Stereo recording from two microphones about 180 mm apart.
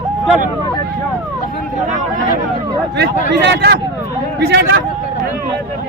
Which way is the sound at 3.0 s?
75° right (ahead or behind).